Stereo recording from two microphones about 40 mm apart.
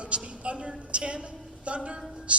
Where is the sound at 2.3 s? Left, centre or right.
Right.